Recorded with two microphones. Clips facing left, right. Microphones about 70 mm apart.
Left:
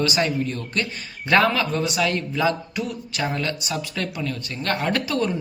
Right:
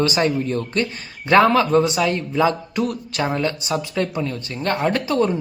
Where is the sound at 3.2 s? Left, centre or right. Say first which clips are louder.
Right 4 dB; right.